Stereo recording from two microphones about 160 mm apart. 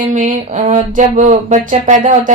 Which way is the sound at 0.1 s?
50° right (ahead or behind).